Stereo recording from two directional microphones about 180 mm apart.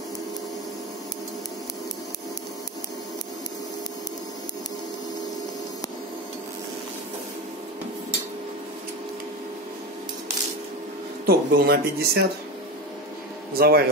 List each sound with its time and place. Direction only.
11.2 s speech: 55° right (ahead or behind)
13.5 s a man's voice: 55° right (ahead or behind)